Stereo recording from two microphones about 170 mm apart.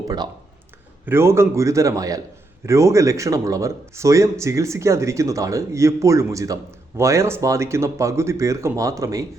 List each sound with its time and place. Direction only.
1.0 s speech: 15° right (ahead or behind)